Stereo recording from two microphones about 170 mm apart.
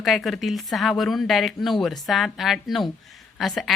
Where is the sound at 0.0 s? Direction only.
Centre (ahead or behind).